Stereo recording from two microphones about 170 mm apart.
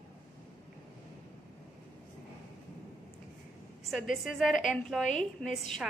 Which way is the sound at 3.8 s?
Centre (ahead or behind).